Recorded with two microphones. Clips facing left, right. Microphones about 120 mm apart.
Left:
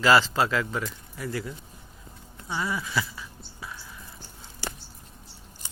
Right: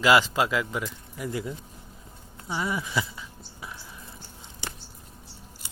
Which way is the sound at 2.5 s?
20° right (ahead or behind).